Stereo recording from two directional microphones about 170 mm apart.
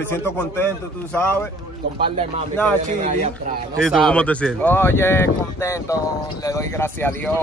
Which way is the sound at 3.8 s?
5° left (ahead or behind).